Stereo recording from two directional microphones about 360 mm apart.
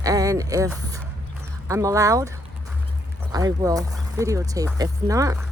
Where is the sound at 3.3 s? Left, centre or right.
Centre.